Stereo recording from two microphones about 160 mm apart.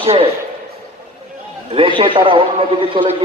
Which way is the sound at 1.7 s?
35° right (ahead or behind).